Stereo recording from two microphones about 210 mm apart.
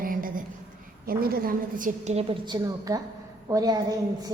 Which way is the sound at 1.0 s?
45° right (ahead or behind).